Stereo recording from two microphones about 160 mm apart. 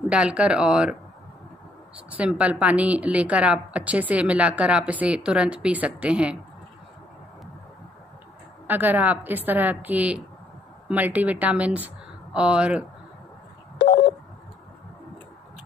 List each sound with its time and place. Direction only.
0.1 s speech: 5° right (ahead or behind)
2.0 s a woman's voice: 10° right (ahead or behind)
8.6 s a woman's voice: 10° right (ahead or behind)
13.7 s telephone dialing: 75° left (ahead or behind)